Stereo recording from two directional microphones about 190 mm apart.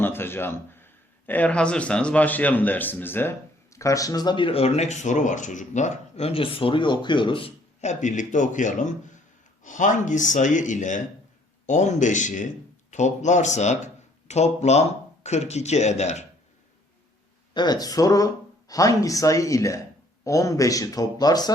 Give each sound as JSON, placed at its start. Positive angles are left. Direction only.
{"t": 0.0, "sound": "a man's voice", "side_deg": 10}
{"t": 17.5, "sound": "a man's voice", "side_deg": 20}